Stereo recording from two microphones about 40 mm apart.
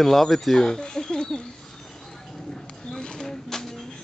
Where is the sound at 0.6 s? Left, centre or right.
Centre.